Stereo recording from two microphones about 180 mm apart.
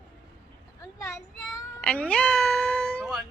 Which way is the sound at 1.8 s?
5° left (ahead or behind).